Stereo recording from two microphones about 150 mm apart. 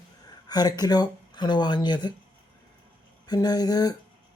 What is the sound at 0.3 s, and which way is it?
Speech, 25° left (ahead or behind).